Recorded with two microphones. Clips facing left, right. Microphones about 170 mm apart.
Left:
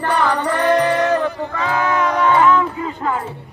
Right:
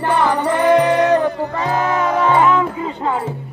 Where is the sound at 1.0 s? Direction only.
25° right (ahead or behind).